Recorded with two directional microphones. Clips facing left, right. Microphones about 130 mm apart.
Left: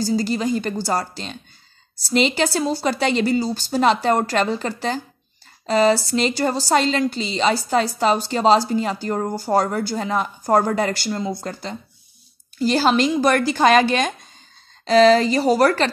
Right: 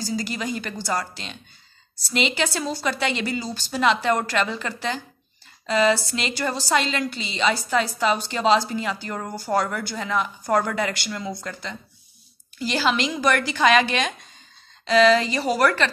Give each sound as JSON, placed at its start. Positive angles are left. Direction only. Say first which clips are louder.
{"t": 0.1, "sound": "a woman's voice", "louder": "left 5 dB", "side_deg": 35}